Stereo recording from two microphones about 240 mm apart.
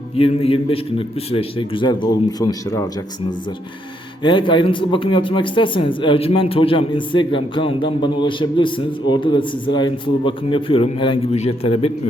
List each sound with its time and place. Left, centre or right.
0.2 s speech: left